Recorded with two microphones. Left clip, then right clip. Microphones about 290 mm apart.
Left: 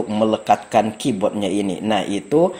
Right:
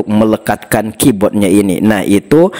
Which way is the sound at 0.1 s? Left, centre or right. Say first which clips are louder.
Right 4 dB; right.